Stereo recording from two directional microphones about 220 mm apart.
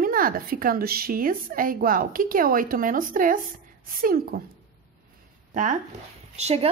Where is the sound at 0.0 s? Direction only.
40° right (ahead or behind).